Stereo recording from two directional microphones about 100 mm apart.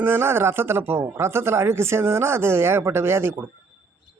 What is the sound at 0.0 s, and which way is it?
Speech, 25° right (ahead or behind).